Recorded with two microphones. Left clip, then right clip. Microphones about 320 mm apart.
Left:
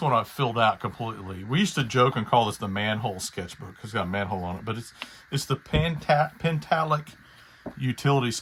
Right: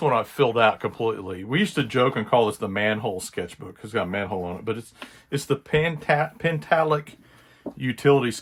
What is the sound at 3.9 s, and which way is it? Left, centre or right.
Speech, centre.